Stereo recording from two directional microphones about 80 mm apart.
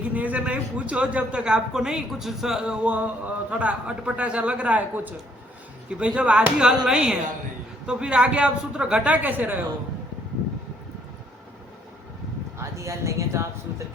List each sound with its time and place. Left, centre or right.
0.1 s a woman's voice: centre
12.5 s speech: right